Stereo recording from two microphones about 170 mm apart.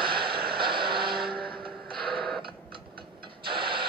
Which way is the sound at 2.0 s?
30° right (ahead or behind).